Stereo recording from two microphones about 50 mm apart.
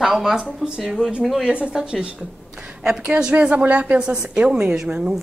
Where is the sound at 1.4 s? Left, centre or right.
Centre.